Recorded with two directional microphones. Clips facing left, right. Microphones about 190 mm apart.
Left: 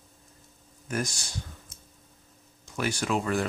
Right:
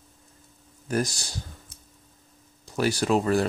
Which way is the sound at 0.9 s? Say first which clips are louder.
Right 5 dB; 35° right (ahead or behind).